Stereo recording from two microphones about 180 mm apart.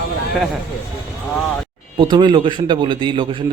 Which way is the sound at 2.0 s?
25° right (ahead or behind).